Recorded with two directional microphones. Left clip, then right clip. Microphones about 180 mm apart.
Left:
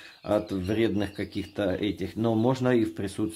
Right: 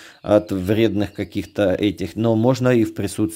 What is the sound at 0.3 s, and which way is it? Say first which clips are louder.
Speech: right 10 dB; 45° right (ahead or behind).